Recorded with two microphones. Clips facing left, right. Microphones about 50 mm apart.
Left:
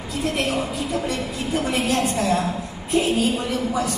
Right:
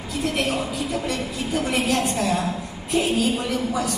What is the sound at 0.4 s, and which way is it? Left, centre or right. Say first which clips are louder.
A woman's voice: left 1 dB; centre.